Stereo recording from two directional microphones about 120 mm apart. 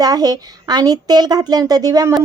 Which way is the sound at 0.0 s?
35° right (ahead or behind).